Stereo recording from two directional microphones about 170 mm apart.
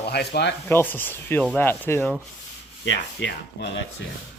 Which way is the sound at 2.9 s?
90° left.